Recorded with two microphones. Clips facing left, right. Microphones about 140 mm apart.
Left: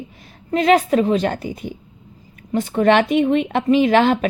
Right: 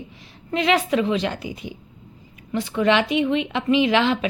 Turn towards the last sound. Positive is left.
turn(degrees=50)  # may be behind; listen again after turning